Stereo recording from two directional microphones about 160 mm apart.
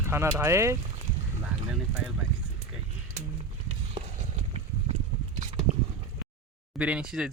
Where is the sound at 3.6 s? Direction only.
45° right (ahead or behind).